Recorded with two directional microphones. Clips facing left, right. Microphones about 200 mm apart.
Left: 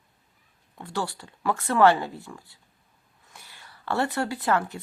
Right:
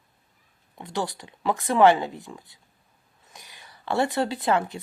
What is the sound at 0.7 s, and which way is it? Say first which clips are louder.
Speech: right 1 dB; 20° right (ahead or behind).